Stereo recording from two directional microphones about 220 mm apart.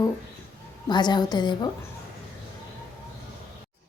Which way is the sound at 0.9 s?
20° left (ahead or behind).